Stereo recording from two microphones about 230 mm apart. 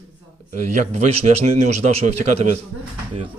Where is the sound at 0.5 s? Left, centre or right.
Right.